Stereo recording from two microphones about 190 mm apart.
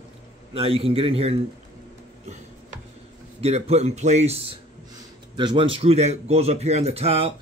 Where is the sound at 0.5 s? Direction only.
30° right (ahead or behind).